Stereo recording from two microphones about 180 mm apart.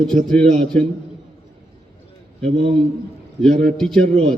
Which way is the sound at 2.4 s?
30° right (ahead or behind).